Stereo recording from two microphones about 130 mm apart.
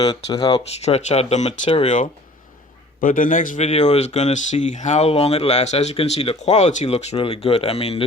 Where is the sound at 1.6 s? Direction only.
45° left (ahead or behind).